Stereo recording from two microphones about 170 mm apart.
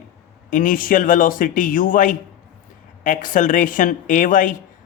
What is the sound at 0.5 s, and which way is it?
Speech, 55° left (ahead or behind).